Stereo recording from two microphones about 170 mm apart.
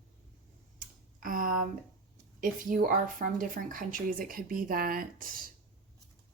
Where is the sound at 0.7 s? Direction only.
55° right (ahead or behind).